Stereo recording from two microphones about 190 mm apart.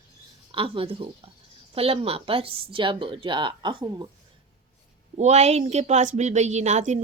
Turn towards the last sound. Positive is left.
turn(degrees=-40)  # may be behind; listen again after turning